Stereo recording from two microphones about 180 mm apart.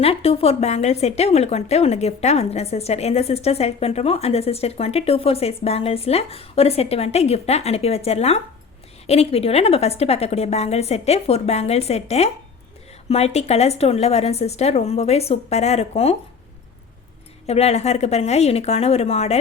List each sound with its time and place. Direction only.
0.0 s a woman's voice: 35° left (ahead or behind)
17.4 s a woman's voice: 35° left (ahead or behind)